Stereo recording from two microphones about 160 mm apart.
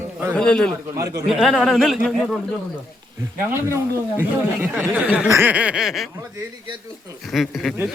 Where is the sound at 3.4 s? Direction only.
15° right (ahead or behind).